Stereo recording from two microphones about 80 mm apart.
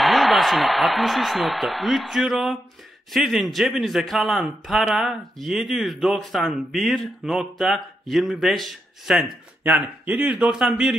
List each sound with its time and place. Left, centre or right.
0.0 s a man's voice: centre
9.6 s a man's voice: centre